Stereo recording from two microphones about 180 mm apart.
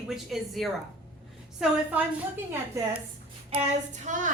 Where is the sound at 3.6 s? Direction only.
40° right (ahead or behind).